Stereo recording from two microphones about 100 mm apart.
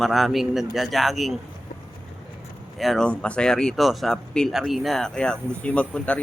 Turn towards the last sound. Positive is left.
turn(degrees=15)  # may be behind; listen again after turning